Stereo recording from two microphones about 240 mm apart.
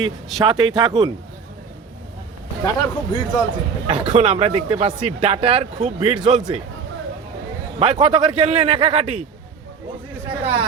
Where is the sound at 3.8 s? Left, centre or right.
Right.